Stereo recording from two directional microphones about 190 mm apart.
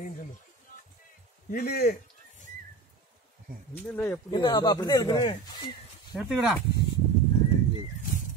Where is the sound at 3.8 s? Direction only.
5° left (ahead or behind).